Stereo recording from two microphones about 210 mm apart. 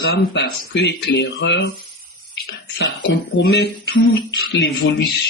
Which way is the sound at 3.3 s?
55° left (ahead or behind).